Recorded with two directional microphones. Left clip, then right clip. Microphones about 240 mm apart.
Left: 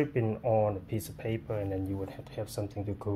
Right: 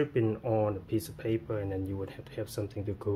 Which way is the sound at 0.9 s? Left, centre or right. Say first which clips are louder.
Right 4 dB; right.